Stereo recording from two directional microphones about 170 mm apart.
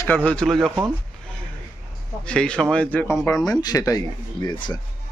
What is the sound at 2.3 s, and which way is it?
A man's voice, 5° left (ahead or behind).